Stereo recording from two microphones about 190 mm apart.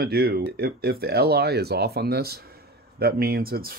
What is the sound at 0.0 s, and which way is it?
Speech, 55° right (ahead or behind).